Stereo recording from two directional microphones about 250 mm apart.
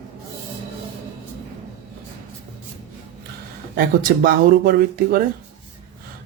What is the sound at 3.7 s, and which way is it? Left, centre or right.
Speech, right.